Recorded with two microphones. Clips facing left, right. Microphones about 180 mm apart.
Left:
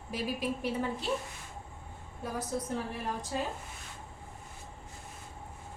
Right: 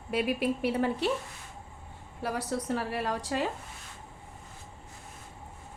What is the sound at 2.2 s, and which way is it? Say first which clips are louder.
A woman's voice: right 3 dB; 75° right (ahead or behind).